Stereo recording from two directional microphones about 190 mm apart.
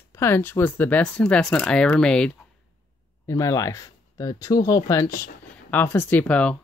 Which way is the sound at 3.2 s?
15° left (ahead or behind).